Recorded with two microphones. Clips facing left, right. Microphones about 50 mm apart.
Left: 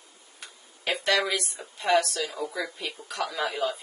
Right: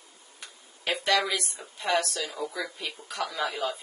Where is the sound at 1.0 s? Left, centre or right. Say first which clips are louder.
Even; centre.